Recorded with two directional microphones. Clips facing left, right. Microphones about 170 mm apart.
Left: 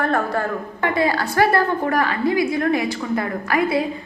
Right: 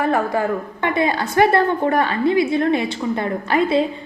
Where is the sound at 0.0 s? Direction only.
15° right (ahead or behind).